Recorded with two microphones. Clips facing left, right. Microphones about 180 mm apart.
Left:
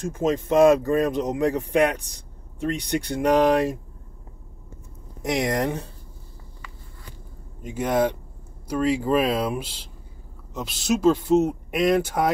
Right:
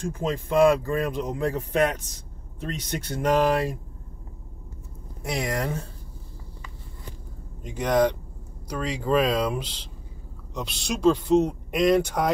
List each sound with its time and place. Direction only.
0.1 s speech: 20° left (ahead or behind)
5.3 s speech: 20° left (ahead or behind)
7.6 s speech: 10° left (ahead or behind)